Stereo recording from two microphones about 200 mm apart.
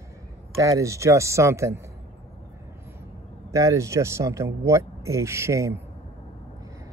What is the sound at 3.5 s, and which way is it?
Speech, 15° right (ahead or behind).